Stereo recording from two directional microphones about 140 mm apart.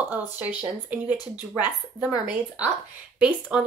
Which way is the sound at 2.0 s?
10° right (ahead or behind).